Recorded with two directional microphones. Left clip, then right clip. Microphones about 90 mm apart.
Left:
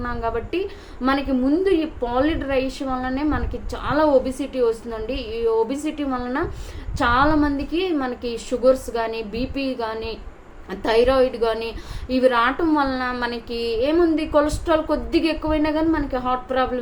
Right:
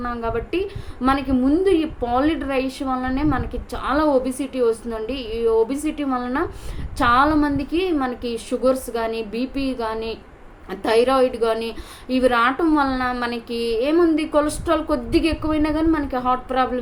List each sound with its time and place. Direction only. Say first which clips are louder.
0.0 s a woman's voice: even; 25° right (ahead or behind)